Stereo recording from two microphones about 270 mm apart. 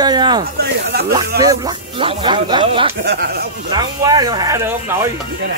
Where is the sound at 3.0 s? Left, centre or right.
Right.